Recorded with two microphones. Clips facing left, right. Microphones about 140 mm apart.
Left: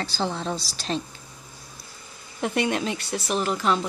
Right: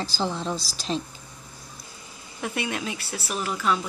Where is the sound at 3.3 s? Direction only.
25° left (ahead or behind).